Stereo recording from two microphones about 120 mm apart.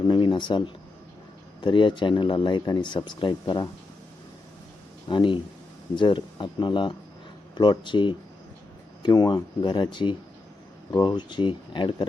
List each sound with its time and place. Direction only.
0.0 s speech: 40° left (ahead or behind)
5.0 s speech: 40° left (ahead or behind)